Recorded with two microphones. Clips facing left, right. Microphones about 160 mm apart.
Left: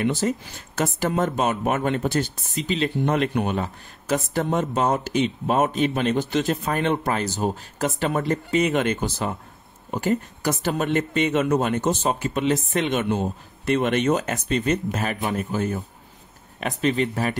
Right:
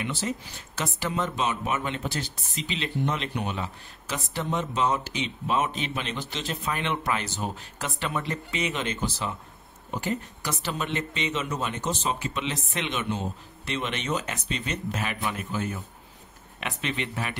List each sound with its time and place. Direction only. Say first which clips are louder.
0.0 s speech: left 8 dB; 45° left (ahead or behind)